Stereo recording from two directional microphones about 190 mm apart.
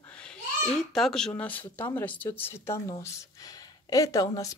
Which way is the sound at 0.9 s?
Centre (ahead or behind).